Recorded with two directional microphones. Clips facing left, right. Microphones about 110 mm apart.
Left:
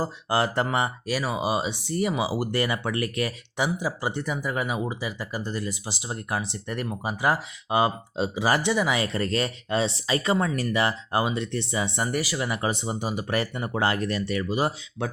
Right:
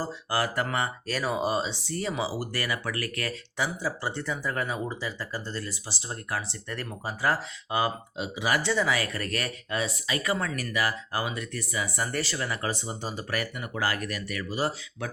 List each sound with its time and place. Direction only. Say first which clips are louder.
0.0 s speech: left 4 dB; 25° left (ahead or behind)
1.1 s speech: left 1 dB; 5° left (ahead or behind); by 8.2 s 25° left (ahead or behind)
8.2 s speech: left 4 dB; 35° left (ahead or behind)
8.6 s speech: left 2 dB; 15° left (ahead or behind)
13.3 s speech: left 5 dB; 30° left (ahead or behind)